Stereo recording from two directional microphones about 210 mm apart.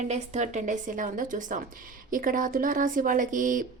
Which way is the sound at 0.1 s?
35° right (ahead or behind).